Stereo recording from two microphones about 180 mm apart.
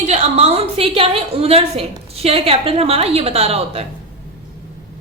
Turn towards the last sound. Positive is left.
turn(degrees=-35)  # may be behind; listen again after turning